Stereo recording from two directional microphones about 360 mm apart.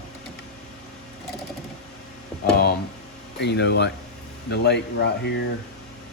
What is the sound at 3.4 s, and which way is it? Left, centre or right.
Speech, left.